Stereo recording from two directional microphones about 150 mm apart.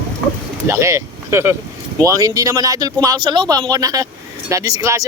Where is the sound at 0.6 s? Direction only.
20° right (ahead or behind).